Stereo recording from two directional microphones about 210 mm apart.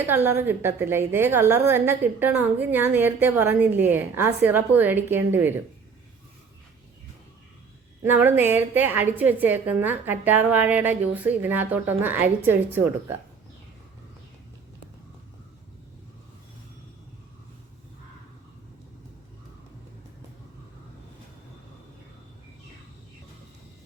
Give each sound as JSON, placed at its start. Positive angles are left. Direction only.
{"t": 0.1, "sound": "a woman's voice", "side_deg": -10}
{"t": 8.0, "sound": "a woman's voice", "side_deg": -10}